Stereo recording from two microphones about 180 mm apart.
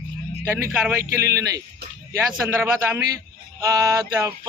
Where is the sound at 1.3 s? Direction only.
20° right (ahead or behind).